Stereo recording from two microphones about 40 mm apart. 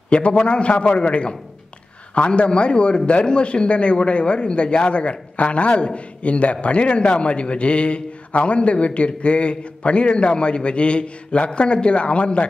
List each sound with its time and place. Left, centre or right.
0.1 s a man's voice: left